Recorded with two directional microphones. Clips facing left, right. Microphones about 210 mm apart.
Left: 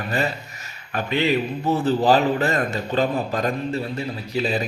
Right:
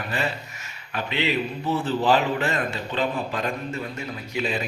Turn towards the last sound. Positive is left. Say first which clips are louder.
# left 4 dB
turn(degrees=35)  # may be behind; listen again after turning